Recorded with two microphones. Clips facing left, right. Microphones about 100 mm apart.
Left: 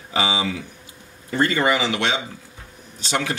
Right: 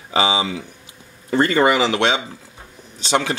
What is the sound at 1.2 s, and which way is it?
Speech, 35° right (ahead or behind).